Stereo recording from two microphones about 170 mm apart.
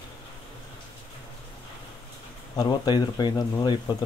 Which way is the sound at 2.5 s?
25° left (ahead or behind).